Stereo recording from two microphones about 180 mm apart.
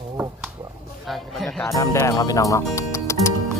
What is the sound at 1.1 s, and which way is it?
Speech, centre (ahead or behind).